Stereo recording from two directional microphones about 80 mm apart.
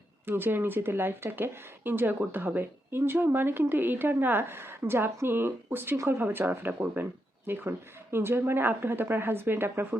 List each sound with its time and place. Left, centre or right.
0.3 s speech: right